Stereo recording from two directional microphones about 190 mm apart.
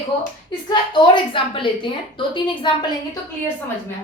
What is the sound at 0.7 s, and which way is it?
A woman's voice, 25° left (ahead or behind).